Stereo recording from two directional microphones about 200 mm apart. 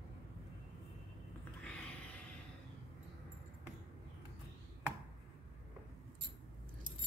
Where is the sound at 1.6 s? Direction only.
5° left (ahead or behind).